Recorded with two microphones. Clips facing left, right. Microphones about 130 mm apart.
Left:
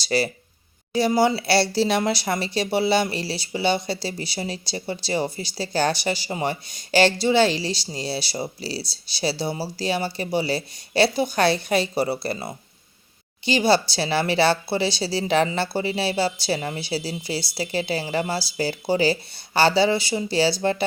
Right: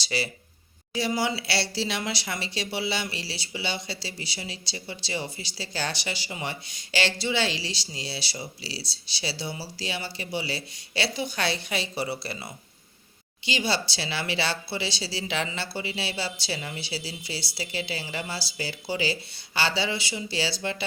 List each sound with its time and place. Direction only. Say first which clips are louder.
0.0 s speech: left 8 dB; 45° left (ahead or behind)